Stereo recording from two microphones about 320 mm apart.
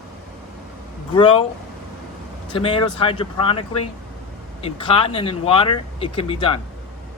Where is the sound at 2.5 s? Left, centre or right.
Centre.